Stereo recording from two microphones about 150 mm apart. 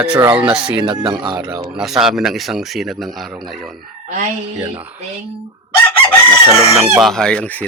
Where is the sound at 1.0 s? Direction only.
30° right (ahead or behind).